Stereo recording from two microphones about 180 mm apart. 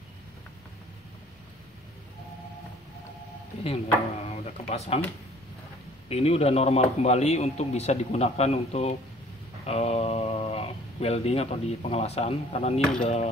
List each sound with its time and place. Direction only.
3.6 s speech: 35° left (ahead or behind)
6.0 s speech: 35° left (ahead or behind)
9.7 s a sound: 35° left (ahead or behind)
11.9 s speech: 35° left (ahead or behind)